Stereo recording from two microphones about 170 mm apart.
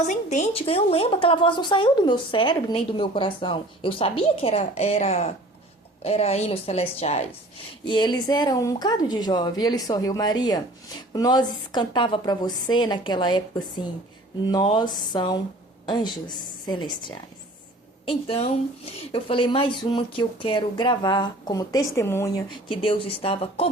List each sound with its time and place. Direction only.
0.1 s a woman's voice: 45° left (ahead or behind)
7.9 s a woman's voice: 25° left (ahead or behind)
22.7 s a woman's voice: 30° left (ahead or behind)